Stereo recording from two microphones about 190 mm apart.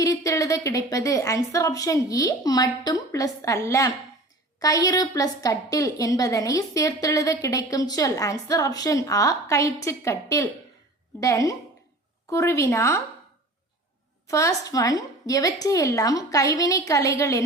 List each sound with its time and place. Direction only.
0.0 s a woman's voice: 15° left (ahead or behind)
14.3 s a woman's voice: 15° left (ahead or behind)